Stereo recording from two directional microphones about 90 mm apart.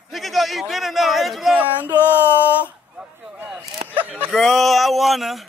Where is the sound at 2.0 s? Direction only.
25° left (ahead or behind).